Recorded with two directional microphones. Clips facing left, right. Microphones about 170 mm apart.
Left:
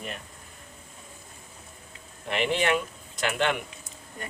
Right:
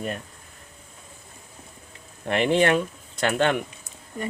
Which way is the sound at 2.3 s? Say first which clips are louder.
Right 5 dB; 50° right (ahead or behind).